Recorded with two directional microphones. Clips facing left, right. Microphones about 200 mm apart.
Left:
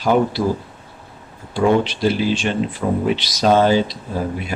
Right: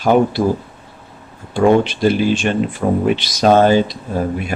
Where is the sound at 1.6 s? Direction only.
50° right (ahead or behind).